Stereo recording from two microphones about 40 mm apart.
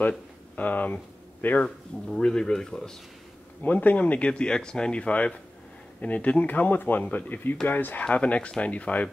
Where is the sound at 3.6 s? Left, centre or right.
Left.